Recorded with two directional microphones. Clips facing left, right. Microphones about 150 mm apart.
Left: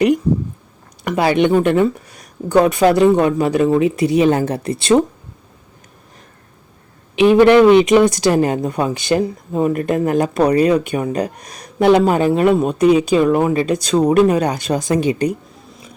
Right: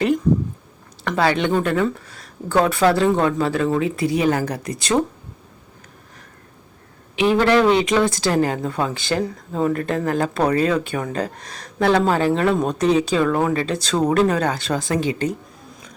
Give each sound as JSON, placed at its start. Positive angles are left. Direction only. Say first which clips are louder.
{"t": 1.0, "sound": "speech", "louder": "left 4 dB", "side_deg": 15}
{"t": 7.2, "sound": "speech", "louder": "left 7 dB", "side_deg": 20}